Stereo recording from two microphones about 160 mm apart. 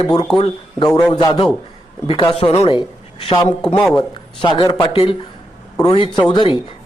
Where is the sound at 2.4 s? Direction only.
35° left (ahead or behind).